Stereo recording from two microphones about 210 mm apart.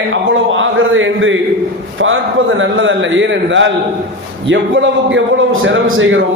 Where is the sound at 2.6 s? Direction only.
65° right (ahead or behind).